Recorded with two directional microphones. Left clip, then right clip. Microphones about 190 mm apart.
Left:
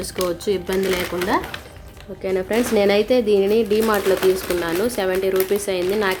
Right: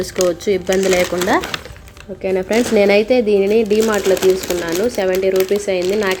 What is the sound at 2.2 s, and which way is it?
A woman's voice, 10° right (ahead or behind).